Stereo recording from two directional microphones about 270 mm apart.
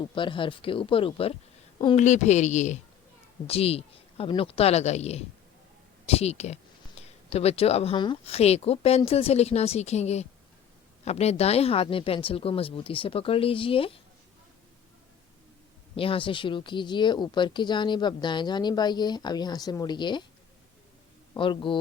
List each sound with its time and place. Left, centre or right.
0.1 s speech: centre
16.0 s speech: centre
21.3 s speech: centre